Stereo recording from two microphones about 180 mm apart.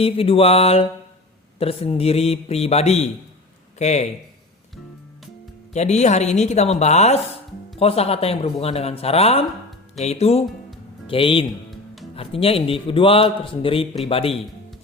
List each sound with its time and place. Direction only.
0.0 s a man's voice: 30° left (ahead or behind)
5.7 s a man's voice: 40° left (ahead or behind)